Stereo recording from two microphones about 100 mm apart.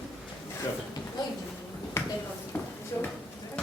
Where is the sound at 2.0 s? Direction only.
25° left (ahead or behind).